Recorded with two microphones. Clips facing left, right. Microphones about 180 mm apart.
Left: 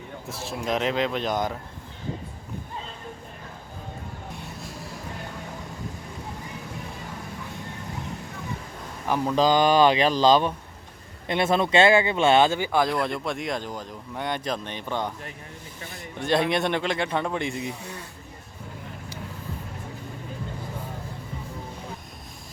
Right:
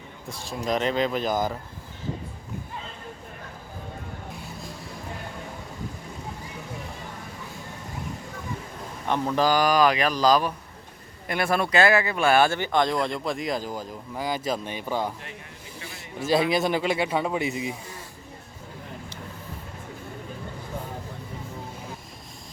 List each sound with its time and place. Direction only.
0.3 s speech: centre (ahead or behind)
9.0 s speech: 10° left (ahead or behind); by 15.1 s 5° right (ahead or behind)
16.1 s speech: 5° right (ahead or behind)